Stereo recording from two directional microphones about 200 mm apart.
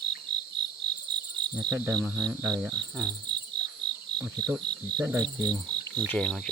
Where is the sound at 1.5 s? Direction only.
15° right (ahead or behind).